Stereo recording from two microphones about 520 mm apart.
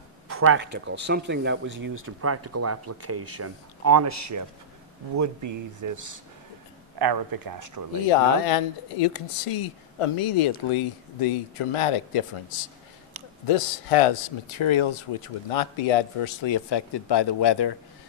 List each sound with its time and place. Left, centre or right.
0.3 s speech: right
8.1 s speech: left
13.5 s speech: left